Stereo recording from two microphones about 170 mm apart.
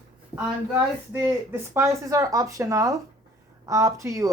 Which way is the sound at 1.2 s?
15° right (ahead or behind).